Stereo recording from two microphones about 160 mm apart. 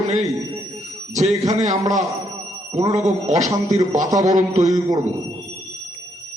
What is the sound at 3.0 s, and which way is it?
Speech, 45° right (ahead or behind).